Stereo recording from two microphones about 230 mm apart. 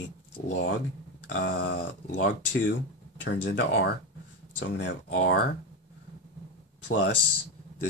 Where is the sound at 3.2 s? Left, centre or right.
Left.